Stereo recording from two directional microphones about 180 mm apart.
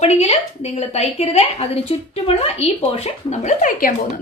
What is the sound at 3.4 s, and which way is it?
Speech, 45° left (ahead or behind).